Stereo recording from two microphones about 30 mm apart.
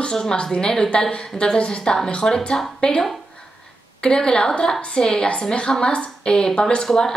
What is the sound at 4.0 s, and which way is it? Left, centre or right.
A woman's voice, left.